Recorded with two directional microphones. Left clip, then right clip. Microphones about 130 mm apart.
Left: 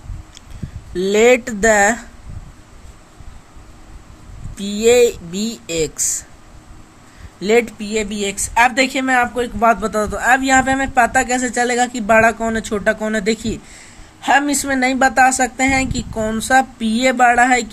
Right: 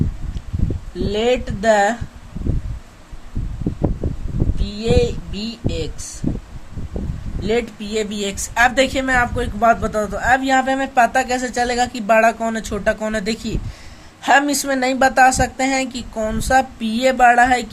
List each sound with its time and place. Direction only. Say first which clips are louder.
0.9 s speech: left 6 dB; 55° left (ahead or behind)
4.6 s speech: left 7 dB; 55° left (ahead or behind)
7.4 s speech: left 5 dB; 45° left (ahead or behind)
7.8 s speech: left 1 dB; 20° left (ahead or behind)
14.2 s speech: even; 10° left (ahead or behind)